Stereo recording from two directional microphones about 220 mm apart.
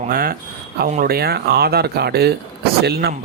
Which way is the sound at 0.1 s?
40° right (ahead or behind).